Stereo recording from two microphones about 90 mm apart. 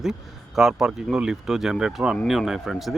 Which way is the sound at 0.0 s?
5° right (ahead or behind).